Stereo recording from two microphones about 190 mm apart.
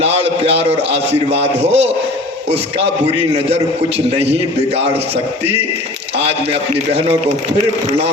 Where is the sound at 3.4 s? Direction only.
30° right (ahead or behind).